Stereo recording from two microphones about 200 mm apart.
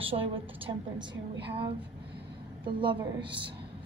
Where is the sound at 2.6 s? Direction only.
25° right (ahead or behind).